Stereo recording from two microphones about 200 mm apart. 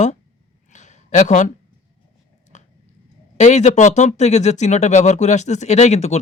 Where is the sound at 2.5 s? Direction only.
35° left (ahead or behind).